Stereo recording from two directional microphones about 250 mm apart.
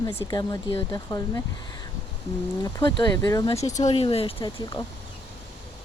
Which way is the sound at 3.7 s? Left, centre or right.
Left.